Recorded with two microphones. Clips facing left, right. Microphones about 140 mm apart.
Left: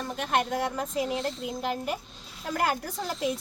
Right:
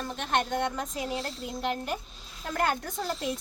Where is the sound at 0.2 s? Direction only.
5° left (ahead or behind).